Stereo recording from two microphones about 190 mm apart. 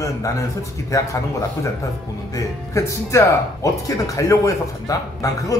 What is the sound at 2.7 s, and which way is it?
Speech, 15° left (ahead or behind).